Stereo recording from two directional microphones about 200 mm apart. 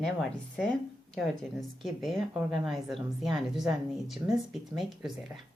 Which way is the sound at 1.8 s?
Centre (ahead or behind).